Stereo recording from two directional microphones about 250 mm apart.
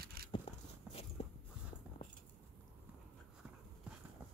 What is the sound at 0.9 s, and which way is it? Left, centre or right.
Walk, left.